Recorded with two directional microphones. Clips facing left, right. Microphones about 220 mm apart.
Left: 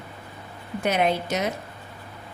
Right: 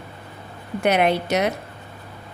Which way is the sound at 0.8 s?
70° right (ahead or behind).